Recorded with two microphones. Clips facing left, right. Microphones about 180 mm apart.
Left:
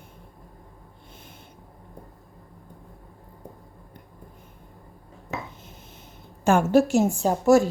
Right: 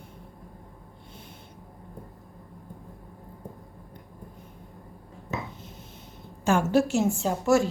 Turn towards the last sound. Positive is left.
turn(degrees=40)  # may be behind; listen again after turning